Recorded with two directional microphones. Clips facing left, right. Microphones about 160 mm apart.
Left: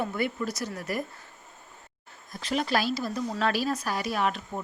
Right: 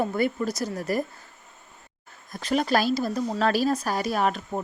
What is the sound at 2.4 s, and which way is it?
Speech, 45° right (ahead or behind).